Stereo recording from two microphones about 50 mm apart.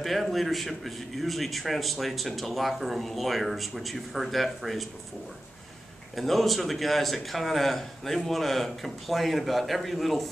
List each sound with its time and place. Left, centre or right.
0.0 s a man's voice: centre
6.1 s a man's voice: centre